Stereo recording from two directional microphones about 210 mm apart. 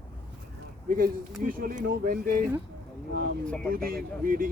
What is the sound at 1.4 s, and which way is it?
Speech, 40° right (ahead or behind).